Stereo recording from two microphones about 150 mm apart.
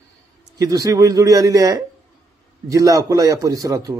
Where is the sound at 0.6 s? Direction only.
25° right (ahead or behind).